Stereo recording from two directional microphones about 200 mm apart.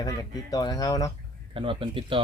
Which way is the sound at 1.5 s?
25° right (ahead or behind).